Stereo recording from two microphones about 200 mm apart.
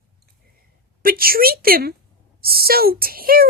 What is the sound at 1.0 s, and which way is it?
A woman's voice, 45° right (ahead or behind).